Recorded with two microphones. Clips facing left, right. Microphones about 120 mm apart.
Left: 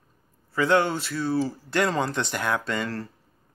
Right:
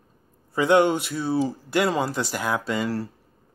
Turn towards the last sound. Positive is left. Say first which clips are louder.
# right 3 dB
turn(degrees=-10)  # may be behind; listen again after turning